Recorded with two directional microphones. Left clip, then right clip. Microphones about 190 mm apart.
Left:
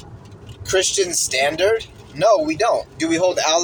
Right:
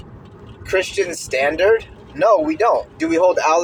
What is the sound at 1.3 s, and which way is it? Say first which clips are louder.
Speech: right 3 dB; 25° left (ahead or behind).